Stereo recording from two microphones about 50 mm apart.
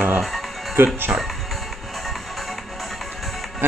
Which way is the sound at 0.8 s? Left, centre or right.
Right.